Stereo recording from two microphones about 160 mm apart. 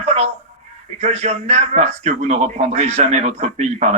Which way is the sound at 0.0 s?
40° right (ahead or behind).